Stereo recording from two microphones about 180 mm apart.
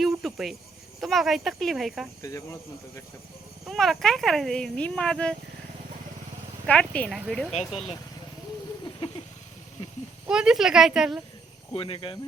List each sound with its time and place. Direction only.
0.0 s cricket: centre (ahead or behind)
1.0 s speech: centre (ahead or behind)
2.2 s speech: 15° left (ahead or behind)
3.7 s speech: centre (ahead or behind)
6.7 s speech: 5° left (ahead or behind)
8.8 s a sound: 25° left (ahead or behind)
10.2 s speech: 5° right (ahead or behind)
11.7 s speech: 30° left (ahead or behind)